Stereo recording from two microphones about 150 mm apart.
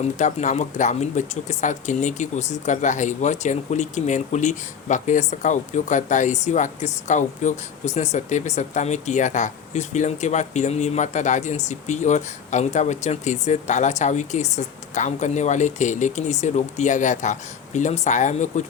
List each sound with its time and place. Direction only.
0.0 s speech: 50° left (ahead or behind)